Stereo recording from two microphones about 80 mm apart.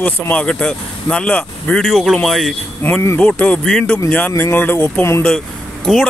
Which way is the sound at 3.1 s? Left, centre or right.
Centre.